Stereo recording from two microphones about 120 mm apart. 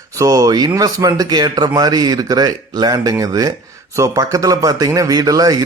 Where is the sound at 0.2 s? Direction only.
30° right (ahead or behind).